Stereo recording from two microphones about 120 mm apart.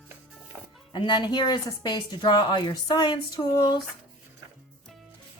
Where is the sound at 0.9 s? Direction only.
40° left (ahead or behind).